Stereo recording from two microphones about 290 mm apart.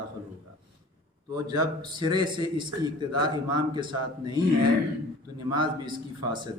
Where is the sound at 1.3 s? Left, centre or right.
Centre.